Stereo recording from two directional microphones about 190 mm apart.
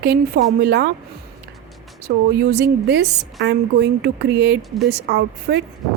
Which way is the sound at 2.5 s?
60° right (ahead or behind).